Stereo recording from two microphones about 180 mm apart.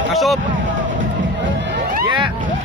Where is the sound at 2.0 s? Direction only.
25° right (ahead or behind).